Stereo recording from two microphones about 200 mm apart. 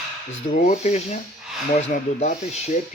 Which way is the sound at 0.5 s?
35° left (ahead or behind).